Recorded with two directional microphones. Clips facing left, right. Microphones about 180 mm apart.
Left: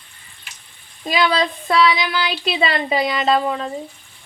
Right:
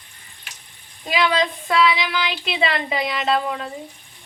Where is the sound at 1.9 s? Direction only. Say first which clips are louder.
Left 2 dB; 35° left (ahead or behind).